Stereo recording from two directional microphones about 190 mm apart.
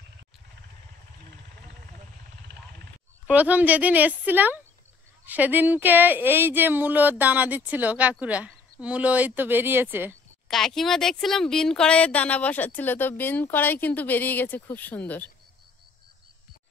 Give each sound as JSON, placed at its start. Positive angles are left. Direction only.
{"t": 2.5, "sound": "helicopter", "side_deg": -65}
{"t": 3.3, "sound": "speech", "side_deg": -10}
{"t": 10.5, "sound": "speech", "side_deg": 0}